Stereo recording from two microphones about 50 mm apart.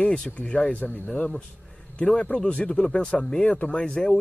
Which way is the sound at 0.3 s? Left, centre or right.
Left.